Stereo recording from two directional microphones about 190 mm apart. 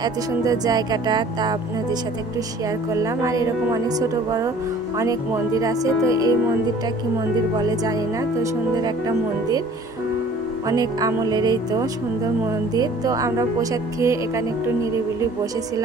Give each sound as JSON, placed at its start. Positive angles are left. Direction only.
{"t": 0.0, "sound": "speech", "side_deg": -20}
{"t": 2.9, "sound": "speech", "side_deg": -15}
{"t": 4.9, "sound": "speech", "side_deg": -15}
{"t": 7.5, "sound": "speech", "side_deg": -20}
{"t": 10.7, "sound": "speech", "side_deg": -20}